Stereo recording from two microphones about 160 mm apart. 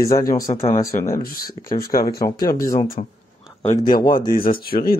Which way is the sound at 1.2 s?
65° left (ahead or behind).